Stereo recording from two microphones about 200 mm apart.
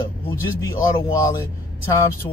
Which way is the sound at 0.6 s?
15° left (ahead or behind).